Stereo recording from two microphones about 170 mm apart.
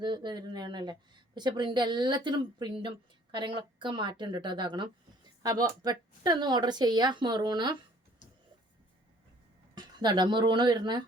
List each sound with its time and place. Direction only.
0.0 s speech: 25° right (ahead or behind)
9.7 s speech: 25° right (ahead or behind)